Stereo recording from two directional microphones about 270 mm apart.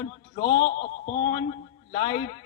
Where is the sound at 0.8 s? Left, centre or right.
Left.